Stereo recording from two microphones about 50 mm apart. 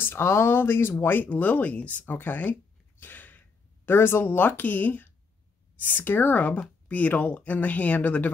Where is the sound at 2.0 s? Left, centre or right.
Left.